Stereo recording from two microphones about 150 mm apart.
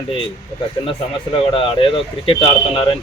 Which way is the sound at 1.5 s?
35° left (ahead or behind).